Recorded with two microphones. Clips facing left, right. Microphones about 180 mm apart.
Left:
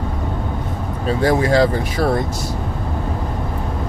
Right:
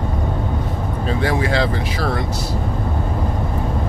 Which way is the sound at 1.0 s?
40° left (ahead or behind).